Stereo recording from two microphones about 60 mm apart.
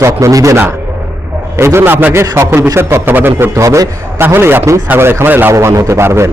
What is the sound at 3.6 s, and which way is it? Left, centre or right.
Speech, right.